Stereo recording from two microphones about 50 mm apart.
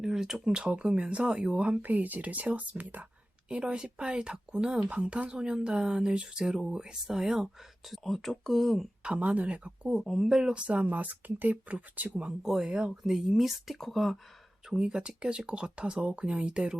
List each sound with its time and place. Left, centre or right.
0.0 s speech: centre
1.8 s speech: right
3.5 s speech: centre
7.9 s speech: centre
9.0 s speech: right
10.0 s speech: centre
10.5 s speech: right
10.8 s speech: right
12.4 s speech: centre
14.7 s speech: centre